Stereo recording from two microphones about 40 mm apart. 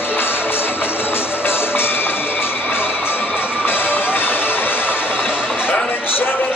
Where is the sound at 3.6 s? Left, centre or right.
Left.